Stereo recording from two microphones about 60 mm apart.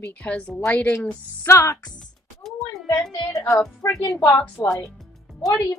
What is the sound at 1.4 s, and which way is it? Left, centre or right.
Speech, left.